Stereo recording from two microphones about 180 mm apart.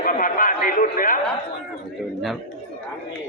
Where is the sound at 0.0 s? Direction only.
50° left (ahead or behind).